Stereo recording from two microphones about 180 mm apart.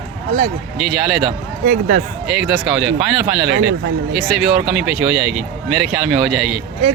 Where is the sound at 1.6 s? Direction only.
45° right (ahead or behind).